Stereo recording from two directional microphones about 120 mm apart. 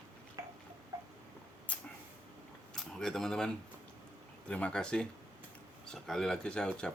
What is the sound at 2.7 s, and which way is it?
Speech, 5° left (ahead or behind).